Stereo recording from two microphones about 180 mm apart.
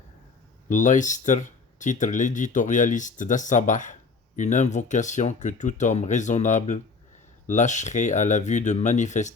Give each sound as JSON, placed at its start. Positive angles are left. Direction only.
{"t": 0.7, "sound": "speech", "side_deg": 45}